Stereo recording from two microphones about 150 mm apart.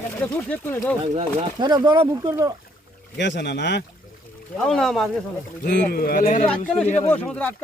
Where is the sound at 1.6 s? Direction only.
30° right (ahead or behind).